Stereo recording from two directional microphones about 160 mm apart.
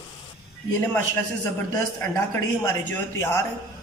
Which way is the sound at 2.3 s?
15° left (ahead or behind).